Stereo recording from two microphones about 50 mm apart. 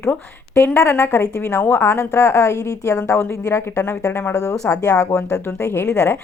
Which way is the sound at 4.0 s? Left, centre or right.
Left.